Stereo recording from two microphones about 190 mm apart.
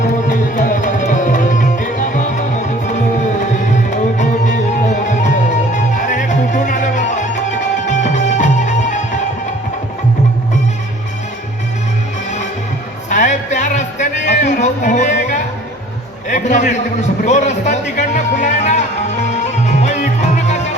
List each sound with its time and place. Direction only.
0.0 s music: 45° left (ahead or behind)
13.1 s music: 40° left (ahead or behind)
16.3 s a sound: 40° left (ahead or behind)
17.2 s music: 40° left (ahead or behind)